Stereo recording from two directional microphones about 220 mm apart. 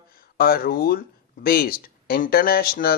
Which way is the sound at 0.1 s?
40° left (ahead or behind).